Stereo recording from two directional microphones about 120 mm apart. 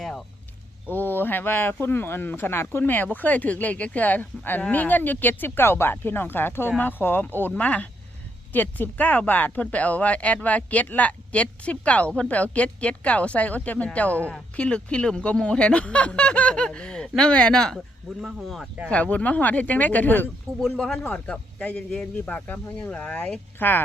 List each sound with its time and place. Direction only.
0.9 s speech: 15° left (ahead or behind); by 18.7 s centre (ahead or behind)
18.9 s speech: 10° left (ahead or behind)
20.6 s speech: 5° left (ahead or behind)